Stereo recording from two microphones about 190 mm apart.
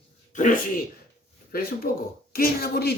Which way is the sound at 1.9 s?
50° left (ahead or behind).